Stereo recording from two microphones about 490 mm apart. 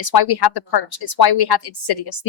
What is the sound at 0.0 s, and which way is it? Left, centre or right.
A woman's voice, left.